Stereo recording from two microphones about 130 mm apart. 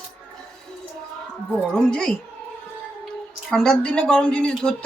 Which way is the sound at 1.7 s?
5° left (ahead or behind).